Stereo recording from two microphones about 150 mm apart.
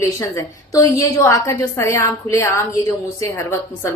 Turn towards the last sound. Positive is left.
turn(degrees=20)  # may be behind; listen again after turning